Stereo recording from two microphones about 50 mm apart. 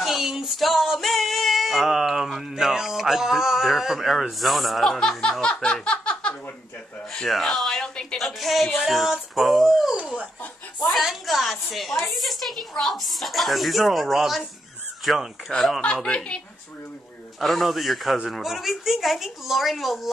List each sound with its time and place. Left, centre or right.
0.0 s female singing: centre
5.4 s snicker: centre
7.2 s female singing: centre
7.9 s a woman's voice: centre
8.2 s female singing: centre
15.8 s speech: centre
17.4 s female singing: centre